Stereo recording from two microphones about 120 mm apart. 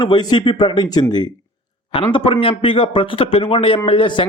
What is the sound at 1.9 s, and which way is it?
A man's voice, 50° left (ahead or behind).